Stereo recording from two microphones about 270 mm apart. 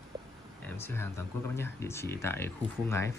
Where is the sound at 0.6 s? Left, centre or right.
Centre.